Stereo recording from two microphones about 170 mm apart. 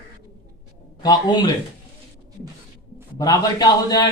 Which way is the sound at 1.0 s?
25° left (ahead or behind).